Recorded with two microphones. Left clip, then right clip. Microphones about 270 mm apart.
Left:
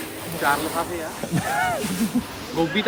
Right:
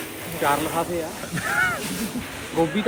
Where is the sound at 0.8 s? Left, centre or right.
Centre.